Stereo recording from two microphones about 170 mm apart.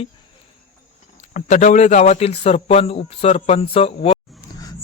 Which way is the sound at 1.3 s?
45° left (ahead or behind).